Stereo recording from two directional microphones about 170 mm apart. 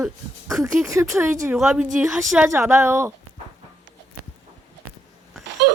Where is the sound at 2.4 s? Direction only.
15° right (ahead or behind).